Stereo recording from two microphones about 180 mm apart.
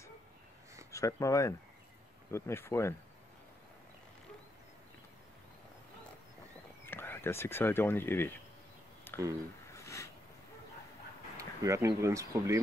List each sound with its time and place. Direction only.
0.9 s speech: 15° left (ahead or behind)
6.9 s speech: 10° left (ahead or behind)
9.1 s a sound: 10° left (ahead or behind)
11.3 s speech: 15° right (ahead or behind)